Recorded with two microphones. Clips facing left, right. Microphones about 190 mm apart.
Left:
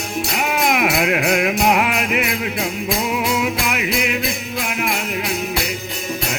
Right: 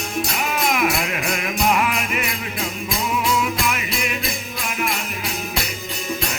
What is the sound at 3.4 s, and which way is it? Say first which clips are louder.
Music: left 2 dB; 65° left (ahead or behind).